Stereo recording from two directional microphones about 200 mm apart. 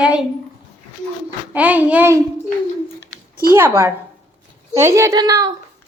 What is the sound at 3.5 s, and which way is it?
A child's voice, 10° right (ahead or behind).